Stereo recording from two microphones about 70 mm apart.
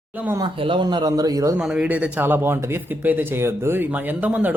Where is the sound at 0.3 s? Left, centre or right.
Right.